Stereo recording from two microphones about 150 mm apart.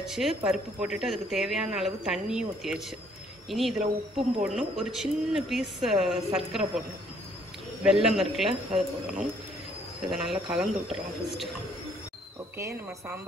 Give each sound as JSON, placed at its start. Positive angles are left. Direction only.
{"t": 0.0, "sound": "speech", "side_deg": 0}
{"t": 7.8, "sound": "speech", "side_deg": -5}
{"t": 12.5, "sound": "speech", "side_deg": -20}